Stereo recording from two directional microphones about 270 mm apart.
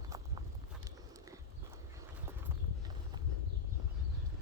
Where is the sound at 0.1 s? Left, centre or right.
Centre.